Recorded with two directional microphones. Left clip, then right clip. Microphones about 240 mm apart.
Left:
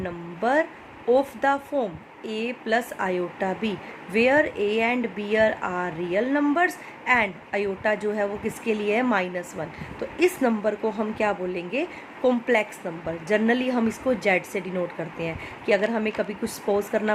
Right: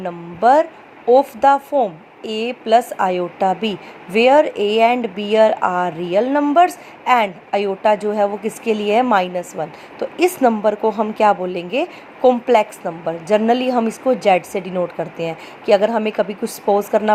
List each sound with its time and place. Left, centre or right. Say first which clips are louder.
0.0 s a woman's voice: right 11 dB; centre